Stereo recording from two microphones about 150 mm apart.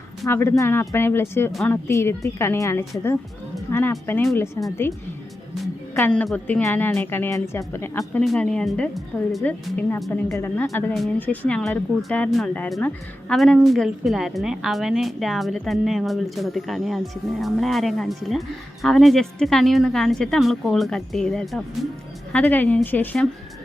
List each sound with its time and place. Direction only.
0.3 s speech: 15° left (ahead or behind)
5.9 s speech: 15° left (ahead or behind)
8.2 s a woman's voice: 5° left (ahead or behind)